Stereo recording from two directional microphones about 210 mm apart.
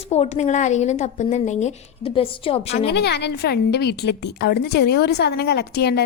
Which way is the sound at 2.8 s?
55° left (ahead or behind).